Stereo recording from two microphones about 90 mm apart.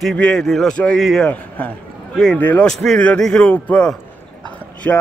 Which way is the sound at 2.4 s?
20° left (ahead or behind).